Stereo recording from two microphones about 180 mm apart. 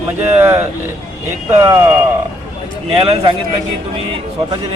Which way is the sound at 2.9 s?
30° right (ahead or behind).